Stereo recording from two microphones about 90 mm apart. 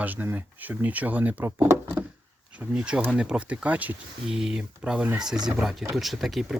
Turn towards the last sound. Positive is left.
turn(degrees=-5)  # may be behind; listen again after turning